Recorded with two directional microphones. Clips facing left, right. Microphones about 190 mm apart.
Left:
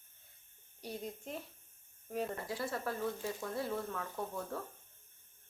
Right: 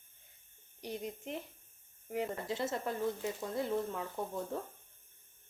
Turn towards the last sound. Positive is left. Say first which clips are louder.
# right 2 dB
turn(degrees=-20)  # may be behind; listen again after turning